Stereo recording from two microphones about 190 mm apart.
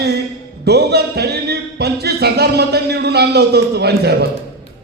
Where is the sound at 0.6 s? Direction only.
60° right (ahead or behind).